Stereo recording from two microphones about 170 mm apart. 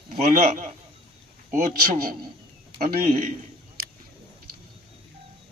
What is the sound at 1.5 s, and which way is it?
Speech, 55° right (ahead or behind).